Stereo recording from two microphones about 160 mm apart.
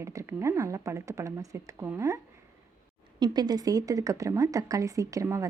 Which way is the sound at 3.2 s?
25° right (ahead or behind).